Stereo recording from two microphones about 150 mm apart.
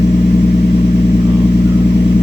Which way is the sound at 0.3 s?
70° left (ahead or behind).